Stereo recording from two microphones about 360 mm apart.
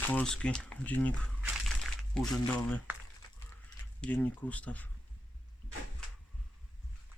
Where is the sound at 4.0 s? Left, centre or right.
Centre.